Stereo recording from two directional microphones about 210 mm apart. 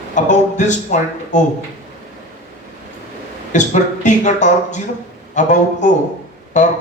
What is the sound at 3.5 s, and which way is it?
Speech, 35° left (ahead or behind).